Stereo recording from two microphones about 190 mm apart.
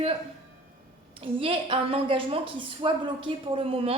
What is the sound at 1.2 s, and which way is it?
A woman's voice, 30° right (ahead or behind).